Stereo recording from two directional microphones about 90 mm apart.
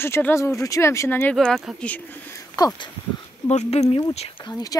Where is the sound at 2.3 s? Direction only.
45° left (ahead or behind).